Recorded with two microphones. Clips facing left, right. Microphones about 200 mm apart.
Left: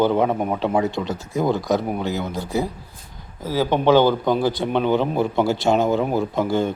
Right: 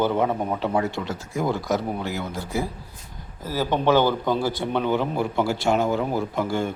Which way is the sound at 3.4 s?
15° left (ahead or behind).